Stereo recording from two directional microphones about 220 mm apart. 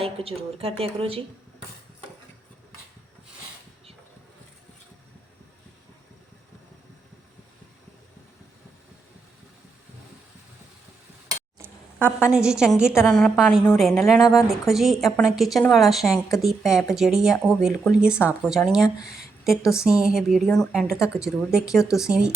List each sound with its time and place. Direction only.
0.0 s speech: 25° right (ahead or behind)
11.6 s a woman's voice: 10° right (ahead or behind)